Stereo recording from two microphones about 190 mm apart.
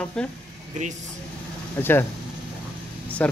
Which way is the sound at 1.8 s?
10° left (ahead or behind).